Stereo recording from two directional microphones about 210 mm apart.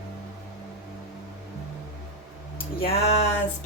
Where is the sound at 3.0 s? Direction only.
30° left (ahead or behind).